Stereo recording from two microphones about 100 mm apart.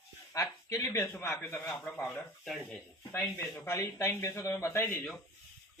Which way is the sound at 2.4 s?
5° left (ahead or behind).